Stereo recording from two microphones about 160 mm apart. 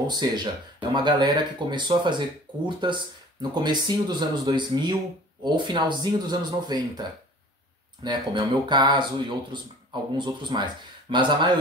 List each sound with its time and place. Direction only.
0.0 s speech: 25° right (ahead or behind)
10.1 s speech: 30° right (ahead or behind)